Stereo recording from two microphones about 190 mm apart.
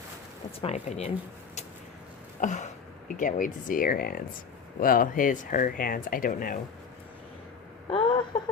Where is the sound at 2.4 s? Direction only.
40° left (ahead or behind).